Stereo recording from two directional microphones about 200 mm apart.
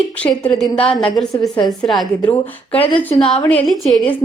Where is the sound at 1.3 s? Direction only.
20° left (ahead or behind).